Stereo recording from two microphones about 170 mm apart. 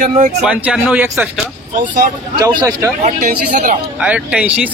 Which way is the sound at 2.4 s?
20° right (ahead or behind).